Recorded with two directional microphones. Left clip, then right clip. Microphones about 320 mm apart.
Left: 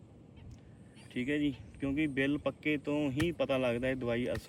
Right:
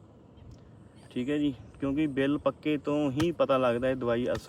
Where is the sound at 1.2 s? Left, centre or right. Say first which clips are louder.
Right 4 dB; centre.